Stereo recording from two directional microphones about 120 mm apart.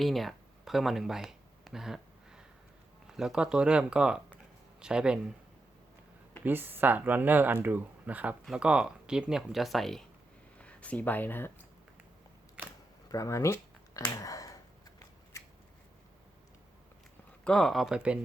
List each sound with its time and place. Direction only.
0.0 s a sound: centre (ahead or behind)
3.2 s speech: 5° right (ahead or behind)
6.4 s speech: 15° right (ahead or behind); by 11.6 s 15° left (ahead or behind)
13.1 s a sound: 25° left (ahead or behind)
14.0 s speech: 35° left (ahead or behind)
17.4 s speech: 5° left (ahead or behind)